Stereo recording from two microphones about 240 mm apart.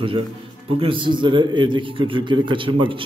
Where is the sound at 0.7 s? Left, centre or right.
Right.